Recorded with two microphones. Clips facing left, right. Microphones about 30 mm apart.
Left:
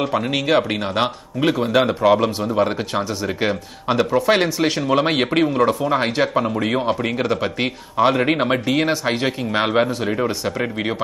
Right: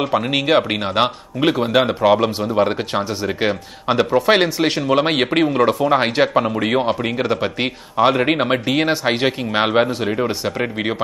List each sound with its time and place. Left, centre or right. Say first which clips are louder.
0.3 s speech: right 1 dB; centre
5.9 s speech: right 3 dB; right